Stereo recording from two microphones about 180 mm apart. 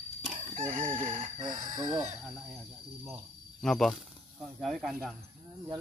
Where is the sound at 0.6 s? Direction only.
50° right (ahead or behind).